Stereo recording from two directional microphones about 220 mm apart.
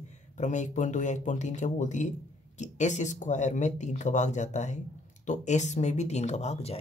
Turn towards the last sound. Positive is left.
turn(degrees=30)  # may be behind; listen again after turning